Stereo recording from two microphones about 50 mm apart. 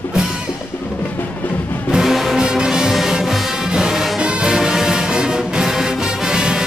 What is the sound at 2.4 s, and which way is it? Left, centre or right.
Music, centre.